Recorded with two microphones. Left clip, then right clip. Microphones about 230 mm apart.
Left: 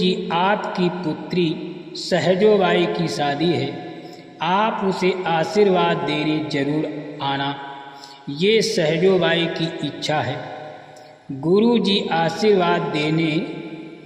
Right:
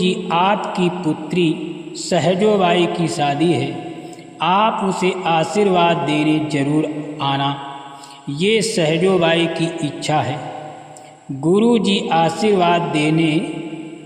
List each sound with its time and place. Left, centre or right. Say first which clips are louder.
0.0 s a man's voice: right 3 dB; right
11.4 s a man's voice: right 2 dB; right